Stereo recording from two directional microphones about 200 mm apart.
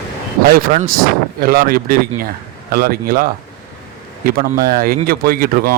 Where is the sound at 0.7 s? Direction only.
35° right (ahead or behind).